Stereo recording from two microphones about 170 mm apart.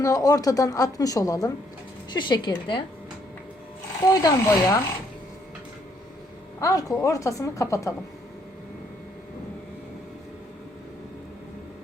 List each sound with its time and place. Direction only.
0.0 s a woman's voice: 20° left (ahead or behind)
4.0 s a woman's voice: 20° left (ahead or behind)
6.6 s a woman's voice: 20° left (ahead or behind)